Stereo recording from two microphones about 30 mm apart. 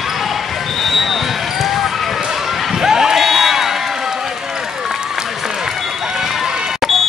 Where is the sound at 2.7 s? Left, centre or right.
Centre.